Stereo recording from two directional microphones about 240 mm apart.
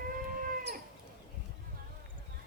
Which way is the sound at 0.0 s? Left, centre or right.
Right.